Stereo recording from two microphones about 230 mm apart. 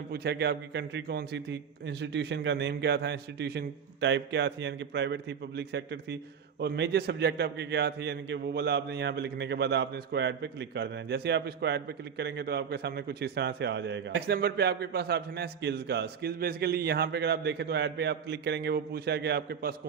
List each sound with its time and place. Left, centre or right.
0.1 s a man's voice: right